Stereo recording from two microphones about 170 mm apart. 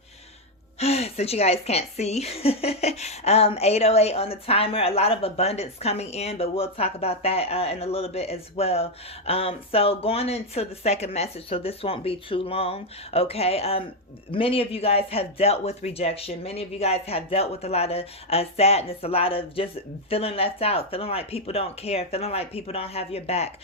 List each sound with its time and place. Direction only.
0.8 s a woman's voice: 35° left (ahead or behind)